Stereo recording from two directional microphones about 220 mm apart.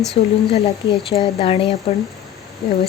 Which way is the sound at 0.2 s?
25° left (ahead or behind).